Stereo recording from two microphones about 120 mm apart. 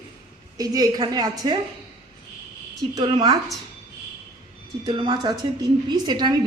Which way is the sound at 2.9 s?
40° right (ahead or behind).